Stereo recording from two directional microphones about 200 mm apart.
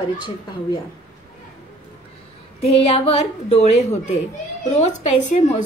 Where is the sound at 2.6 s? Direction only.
30° left (ahead or behind).